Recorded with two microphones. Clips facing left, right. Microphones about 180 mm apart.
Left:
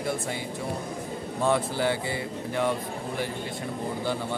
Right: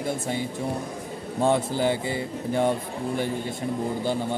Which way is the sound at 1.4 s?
25° right (ahead or behind).